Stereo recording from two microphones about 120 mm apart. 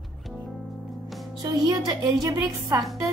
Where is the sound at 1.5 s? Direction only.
35° right (ahead or behind).